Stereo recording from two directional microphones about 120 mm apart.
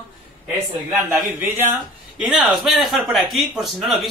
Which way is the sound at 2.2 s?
10° right (ahead or behind).